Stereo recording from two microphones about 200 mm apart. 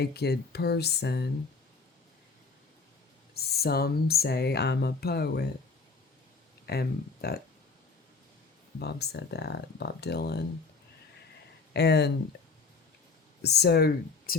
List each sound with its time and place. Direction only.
0.0 s speech: 55° left (ahead or behind)
3.3 s speech: 50° left (ahead or behind)
6.7 s speech: 50° left (ahead or behind)
8.8 s speech: 55° left (ahead or behind)
11.7 s speech: 55° left (ahead or behind)
13.4 s speech: 55° left (ahead or behind)